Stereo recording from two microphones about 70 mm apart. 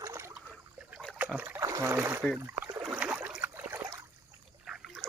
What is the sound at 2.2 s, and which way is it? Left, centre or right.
Speech, centre.